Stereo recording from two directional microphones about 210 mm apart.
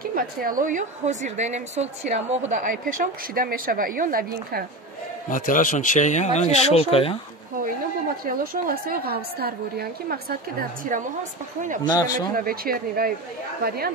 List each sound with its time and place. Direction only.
0.0 s a woman's voice: 45° right (ahead or behind)
5.3 s speech: 40° left (ahead or behind)
8.3 s a woman's voice: 45° right (ahead or behind)
11.6 s a woman's voice: 40° right (ahead or behind)
11.9 s speech: 20° left (ahead or behind)
12.4 s a woman's voice: 45° right (ahead or behind)